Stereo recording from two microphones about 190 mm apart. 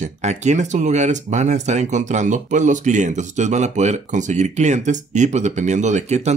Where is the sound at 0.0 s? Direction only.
35° right (ahead or behind).